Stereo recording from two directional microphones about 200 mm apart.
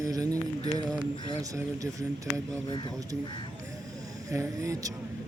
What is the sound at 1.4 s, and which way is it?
Speech, 15° right (ahead or behind).